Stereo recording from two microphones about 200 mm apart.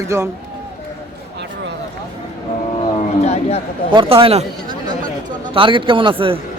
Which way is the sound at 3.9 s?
25° right (ahead or behind).